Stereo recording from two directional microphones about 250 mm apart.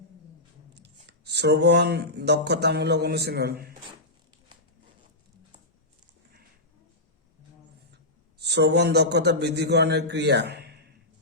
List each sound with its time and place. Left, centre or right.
1.0 s speech: right
8.4 s a man's voice: right